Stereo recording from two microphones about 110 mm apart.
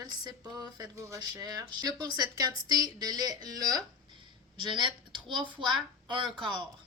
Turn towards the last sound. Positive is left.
turn(degrees=-50)  # may be behind; listen again after turning